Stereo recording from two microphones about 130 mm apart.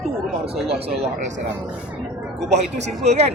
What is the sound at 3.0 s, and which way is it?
Speech, 55° right (ahead or behind).